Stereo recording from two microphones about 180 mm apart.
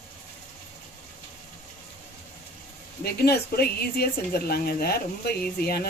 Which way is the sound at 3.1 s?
60° left (ahead or behind).